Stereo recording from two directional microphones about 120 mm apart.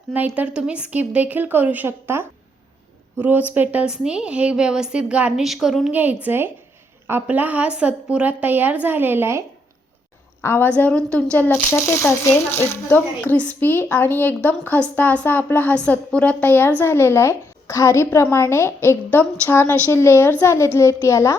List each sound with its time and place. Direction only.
0.3 s a woman's voice: 10° right (ahead or behind)
10.4 s speech: 20° left (ahead or behind)